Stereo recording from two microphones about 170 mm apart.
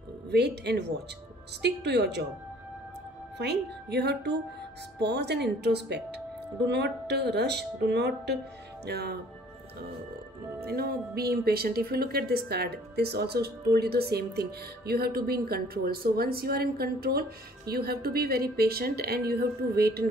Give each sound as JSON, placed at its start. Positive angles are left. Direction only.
{"t": 0.3, "sound": "a woman's voice", "side_deg": -75}
{"t": 3.3, "sound": "a woman's voice", "side_deg": -75}
{"t": 8.8, "sound": "a woman's voice", "side_deg": -70}
{"t": 10.6, "sound": "speech", "side_deg": -65}